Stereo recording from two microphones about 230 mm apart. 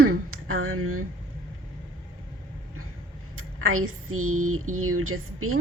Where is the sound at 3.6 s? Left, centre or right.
Right.